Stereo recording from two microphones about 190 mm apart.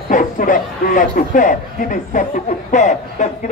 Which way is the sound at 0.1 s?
45° left (ahead or behind).